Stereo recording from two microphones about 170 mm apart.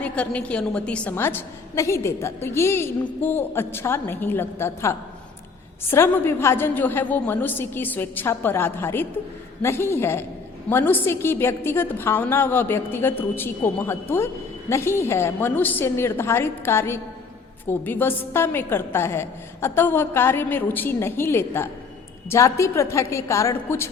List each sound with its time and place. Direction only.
0.0 s a woman's voice: 10° left (ahead or behind)